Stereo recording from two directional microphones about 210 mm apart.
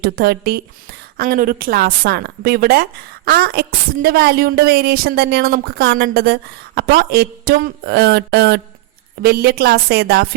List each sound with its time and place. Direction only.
0.0 s a woman's voice: 45° right (ahead or behind)